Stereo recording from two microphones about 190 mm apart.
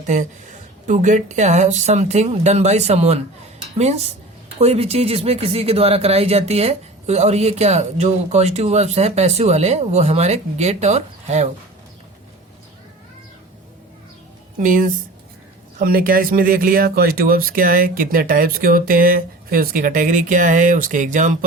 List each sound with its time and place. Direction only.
0.1 s speech: 40° right (ahead or behind)
14.6 s speech: 45° right (ahead or behind)